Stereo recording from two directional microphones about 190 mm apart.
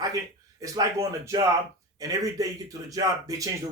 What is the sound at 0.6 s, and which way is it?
Speech, 15° right (ahead or behind).